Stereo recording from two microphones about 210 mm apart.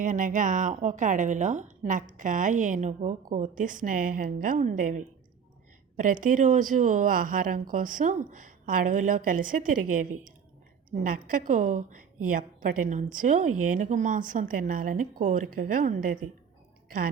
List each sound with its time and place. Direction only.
0.0 s a woman's voice: 40° right (ahead or behind)